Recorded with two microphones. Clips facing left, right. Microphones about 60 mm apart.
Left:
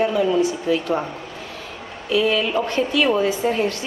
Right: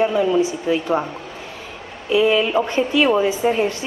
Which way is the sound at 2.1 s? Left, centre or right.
Centre.